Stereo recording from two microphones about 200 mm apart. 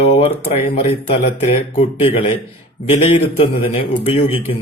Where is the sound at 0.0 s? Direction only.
30° left (ahead or behind).